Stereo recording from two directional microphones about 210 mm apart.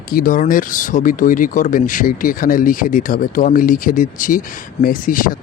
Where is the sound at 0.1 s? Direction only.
40° left (ahead or behind).